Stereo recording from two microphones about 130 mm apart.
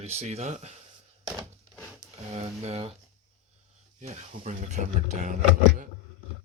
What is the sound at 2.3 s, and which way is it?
Speech, 55° right (ahead or behind).